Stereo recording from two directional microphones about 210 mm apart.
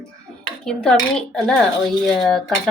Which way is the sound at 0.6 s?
Centre (ahead or behind).